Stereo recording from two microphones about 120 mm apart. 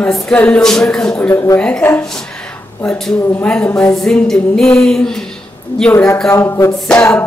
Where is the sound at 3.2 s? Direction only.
20° left (ahead or behind).